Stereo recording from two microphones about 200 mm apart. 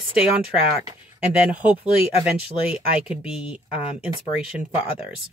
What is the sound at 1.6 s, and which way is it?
Speech, 25° left (ahead or behind).